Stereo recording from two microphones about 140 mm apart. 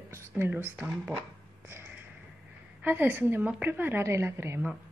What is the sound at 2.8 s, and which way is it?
A woman's voice, 15° right (ahead or behind).